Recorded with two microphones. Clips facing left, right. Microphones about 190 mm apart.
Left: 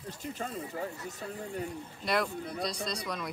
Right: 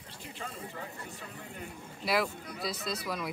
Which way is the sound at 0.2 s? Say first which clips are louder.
Left 4 dB; 40° left (ahead or behind).